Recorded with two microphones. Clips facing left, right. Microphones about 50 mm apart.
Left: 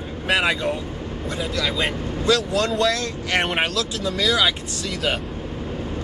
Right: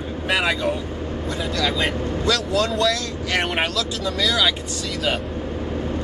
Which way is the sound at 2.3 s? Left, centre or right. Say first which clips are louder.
Left 2 dB; left.